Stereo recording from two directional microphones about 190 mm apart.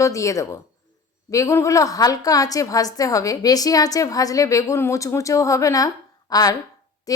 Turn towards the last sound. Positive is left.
turn(degrees=20)  # may be behind; listen again after turning